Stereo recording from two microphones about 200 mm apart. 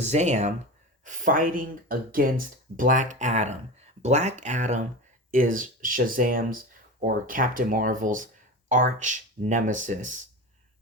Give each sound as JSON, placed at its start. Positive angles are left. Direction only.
{"t": 0.0, "sound": "speech", "side_deg": -35}